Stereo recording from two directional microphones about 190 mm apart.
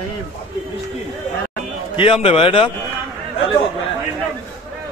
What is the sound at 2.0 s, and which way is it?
Speech, 30° left (ahead or behind).